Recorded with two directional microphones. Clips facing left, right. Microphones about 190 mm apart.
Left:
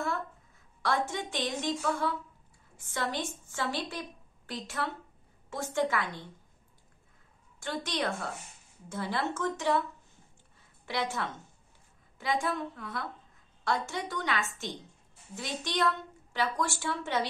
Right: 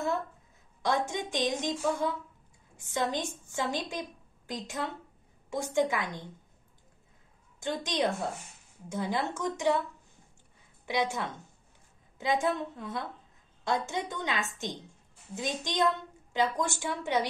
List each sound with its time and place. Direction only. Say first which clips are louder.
0.8 s a woman's voice: right 1 dB; 20° right (ahead or behind)
7.6 s a woman's voice: right 3 dB; 20° right (ahead or behind)
10.9 s a woman's voice: right 3 dB; 15° right (ahead or behind)